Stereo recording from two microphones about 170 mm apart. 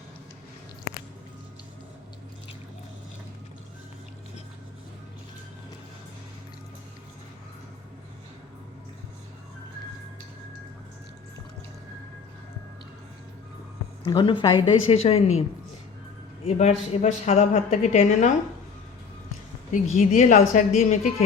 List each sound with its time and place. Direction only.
14.0 s a woman's voice: 25° left (ahead or behind); by 18.3 s 45° left (ahead or behind)
19.7 s a woman's voice: 45° left (ahead or behind)